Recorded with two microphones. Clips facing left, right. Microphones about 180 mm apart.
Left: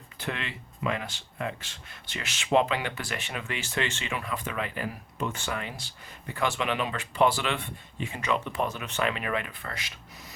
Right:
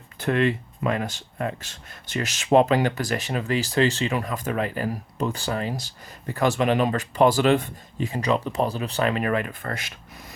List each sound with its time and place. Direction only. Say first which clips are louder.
0.2 s speech: right 13 dB; 45° right (ahead or behind)